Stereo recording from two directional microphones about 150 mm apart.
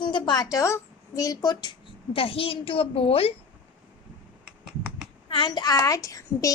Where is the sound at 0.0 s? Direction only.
30° left (ahead or behind).